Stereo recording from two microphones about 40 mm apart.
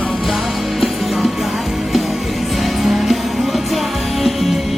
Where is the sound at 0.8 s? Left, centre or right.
Centre.